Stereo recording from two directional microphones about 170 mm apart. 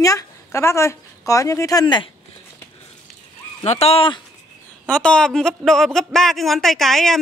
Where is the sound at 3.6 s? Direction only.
35° left (ahead or behind).